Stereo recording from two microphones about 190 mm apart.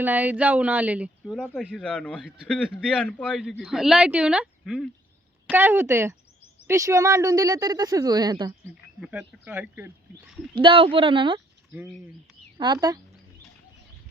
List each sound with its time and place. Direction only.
0.0 s a man's voice: 10° right (ahead or behind)
9.0 s speech: 5° right (ahead or behind)
10.5 s speech: 25° right (ahead or behind)
12.5 s speech: 25° right (ahead or behind)